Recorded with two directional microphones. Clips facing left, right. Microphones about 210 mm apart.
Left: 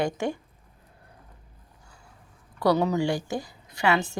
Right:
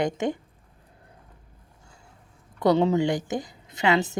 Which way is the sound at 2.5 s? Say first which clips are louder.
Right 2 dB; 25° right (ahead or behind).